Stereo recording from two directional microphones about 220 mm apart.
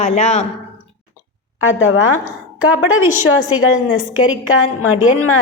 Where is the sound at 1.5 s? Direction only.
65° left (ahead or behind).